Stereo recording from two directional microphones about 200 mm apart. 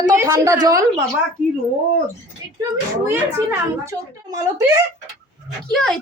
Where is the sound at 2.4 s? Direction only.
15° right (ahead or behind).